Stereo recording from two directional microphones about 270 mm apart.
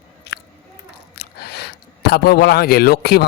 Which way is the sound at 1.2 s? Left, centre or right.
Left.